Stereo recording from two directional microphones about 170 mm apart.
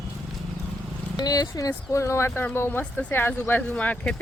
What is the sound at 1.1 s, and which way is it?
A woman's voice, 20° left (ahead or behind).